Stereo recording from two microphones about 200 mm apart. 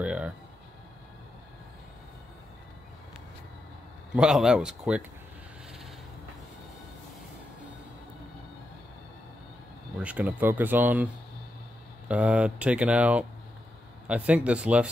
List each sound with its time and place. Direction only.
0.0 s a sound: 5° right (ahead or behind)
4.1 s speech: 5° right (ahead or behind)
9.9 s speech: 5° right (ahead or behind)
12.1 s speech: 5° right (ahead or behind)